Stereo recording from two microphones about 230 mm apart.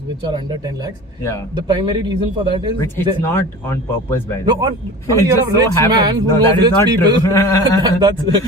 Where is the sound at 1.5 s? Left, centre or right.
Centre.